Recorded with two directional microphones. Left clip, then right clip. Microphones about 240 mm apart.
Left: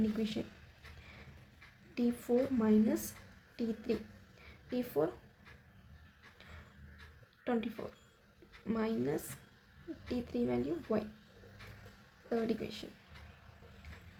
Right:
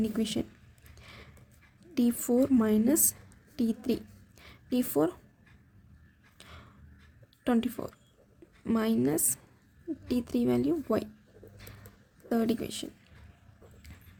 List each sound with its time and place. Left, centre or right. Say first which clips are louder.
0.2 s a woman's voice: right 6 dB; right
2.0 s a woman's voice: right 5 dB; right
4.4 s a sound: right 7 dB; right
7.4 s a woman's voice: right 7 dB; right
12.3 s a woman's voice: right 5 dB; right